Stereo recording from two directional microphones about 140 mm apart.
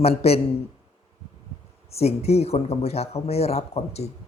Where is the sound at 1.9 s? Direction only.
45° left (ahead or behind).